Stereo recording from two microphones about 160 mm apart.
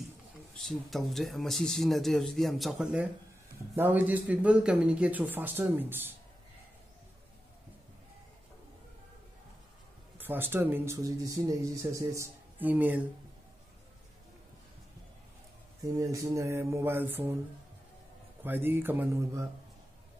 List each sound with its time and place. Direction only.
0.6 s a man's voice: centre (ahead or behind)
10.1 s speech: 10° right (ahead or behind)
15.8 s speech: 20° right (ahead or behind)
18.4 s speech: 10° right (ahead or behind)